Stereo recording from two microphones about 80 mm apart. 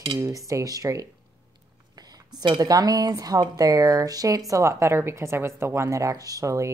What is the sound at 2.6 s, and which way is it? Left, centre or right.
Speech, right.